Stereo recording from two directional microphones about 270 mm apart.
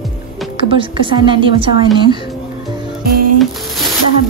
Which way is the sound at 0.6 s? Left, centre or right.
Centre.